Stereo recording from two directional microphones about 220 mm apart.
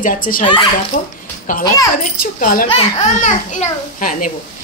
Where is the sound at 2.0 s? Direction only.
40° left (ahead or behind).